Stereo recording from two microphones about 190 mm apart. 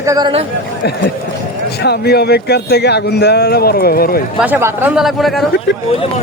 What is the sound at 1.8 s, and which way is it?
Speech, 60° left (ahead or behind).